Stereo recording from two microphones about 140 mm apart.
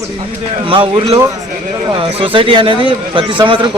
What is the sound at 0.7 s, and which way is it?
A man's voice, 40° right (ahead or behind).